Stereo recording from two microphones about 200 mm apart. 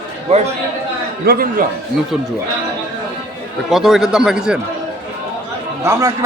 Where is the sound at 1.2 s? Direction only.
50° right (ahead or behind).